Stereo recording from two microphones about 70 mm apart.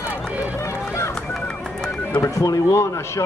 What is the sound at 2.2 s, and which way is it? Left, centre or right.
Speech, left.